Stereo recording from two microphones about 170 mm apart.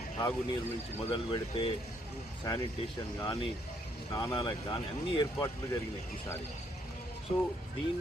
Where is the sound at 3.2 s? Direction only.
30° left (ahead or behind).